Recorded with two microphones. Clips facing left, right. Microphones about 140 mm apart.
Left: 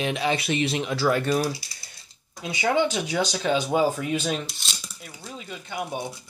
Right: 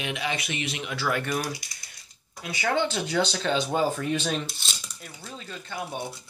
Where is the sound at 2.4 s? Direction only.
20° left (ahead or behind).